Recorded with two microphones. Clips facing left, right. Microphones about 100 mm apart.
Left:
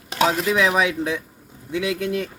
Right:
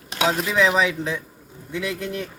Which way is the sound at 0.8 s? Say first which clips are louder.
Left 2 dB; 15° left (ahead or behind).